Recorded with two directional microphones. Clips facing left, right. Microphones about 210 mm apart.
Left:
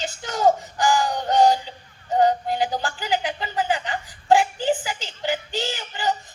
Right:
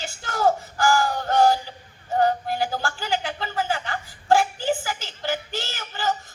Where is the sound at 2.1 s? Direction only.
20° left (ahead or behind).